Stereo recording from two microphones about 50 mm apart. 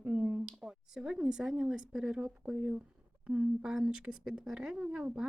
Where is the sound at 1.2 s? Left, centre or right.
Centre.